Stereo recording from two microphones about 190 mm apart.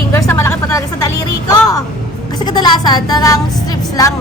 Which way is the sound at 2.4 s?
20° left (ahead or behind).